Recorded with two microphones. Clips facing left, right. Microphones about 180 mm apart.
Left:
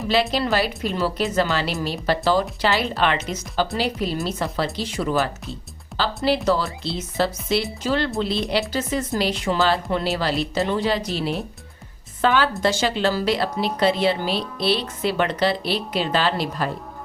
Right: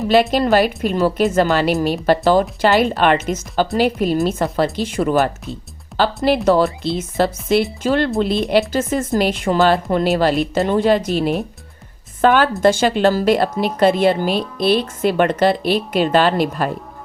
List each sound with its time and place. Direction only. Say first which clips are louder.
0.1 s a woman's voice: right 7 dB; 50° right (ahead or behind)